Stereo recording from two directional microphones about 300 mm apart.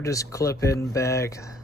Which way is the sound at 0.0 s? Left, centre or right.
Centre.